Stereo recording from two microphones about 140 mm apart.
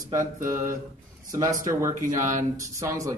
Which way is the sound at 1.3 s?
25° right (ahead or behind).